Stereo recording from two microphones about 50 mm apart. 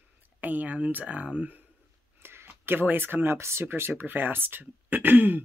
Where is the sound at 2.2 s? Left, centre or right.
Right.